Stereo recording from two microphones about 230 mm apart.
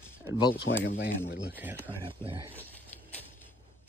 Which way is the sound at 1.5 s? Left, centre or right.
Centre.